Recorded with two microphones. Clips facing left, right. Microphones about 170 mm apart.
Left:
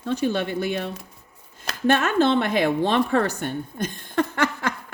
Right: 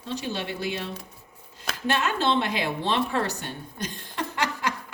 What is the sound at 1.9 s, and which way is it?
A woman's voice, 50° left (ahead or behind).